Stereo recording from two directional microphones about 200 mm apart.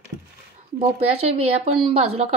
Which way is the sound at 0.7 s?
30° right (ahead or behind).